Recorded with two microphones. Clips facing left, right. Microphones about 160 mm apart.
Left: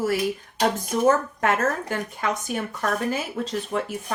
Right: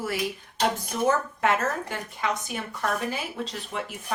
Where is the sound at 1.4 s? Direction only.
45° left (ahead or behind).